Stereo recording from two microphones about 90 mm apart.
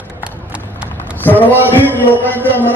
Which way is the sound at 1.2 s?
20° left (ahead or behind).